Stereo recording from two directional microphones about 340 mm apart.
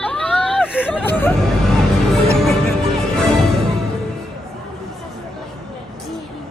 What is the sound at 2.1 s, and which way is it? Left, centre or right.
Music, centre.